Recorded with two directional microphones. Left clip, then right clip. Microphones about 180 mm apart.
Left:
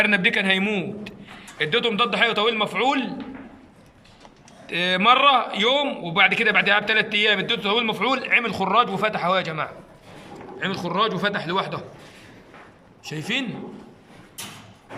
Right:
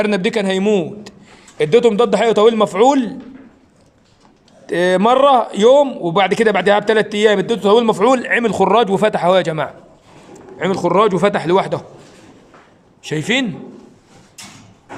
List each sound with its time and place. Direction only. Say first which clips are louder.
0.0 s a man's voice: right 2 dB; 25° right (ahead or behind)
4.6 s a man's voice: right 5 dB; 35° right (ahead or behind)
10.6 s a man's voice: right 9 dB; 50° right (ahead or behind)
13.0 s a man's voice: right 9 dB; 50° right (ahead or behind)